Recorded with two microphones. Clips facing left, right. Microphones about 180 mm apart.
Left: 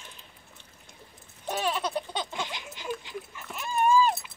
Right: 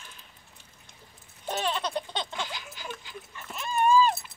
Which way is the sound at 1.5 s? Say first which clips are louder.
Left 1 dB; 10° left (ahead or behind).